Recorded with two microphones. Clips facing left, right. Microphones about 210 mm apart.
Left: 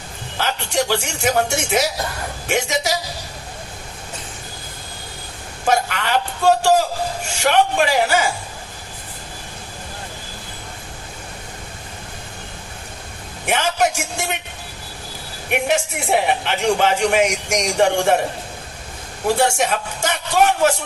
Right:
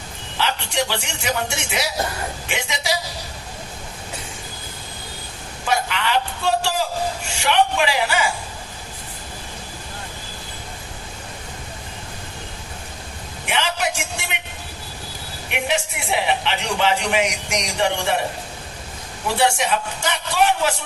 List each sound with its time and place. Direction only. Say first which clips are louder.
0.3 s a man's voice: left 2 dB; 45° left (ahead or behind)
5.6 s a sound: left 3 dB; 45° left (ahead or behind)
7.3 s a man's voice: left 3 dB; 45° left (ahead or behind)
13.5 s a man's voice: left 5 dB; 45° left (ahead or behind)
15.4 s a man's voice: left 4 dB; 50° left (ahead or behind)
19.4 s a man's voice: right 3 dB; 45° left (ahead or behind)